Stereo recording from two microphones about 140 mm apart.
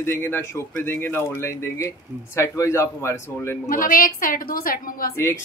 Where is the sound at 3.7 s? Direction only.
80° left.